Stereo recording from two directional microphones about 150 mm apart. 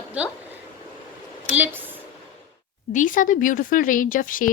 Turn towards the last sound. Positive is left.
turn(degrees=65)  # may be behind; listen again after turning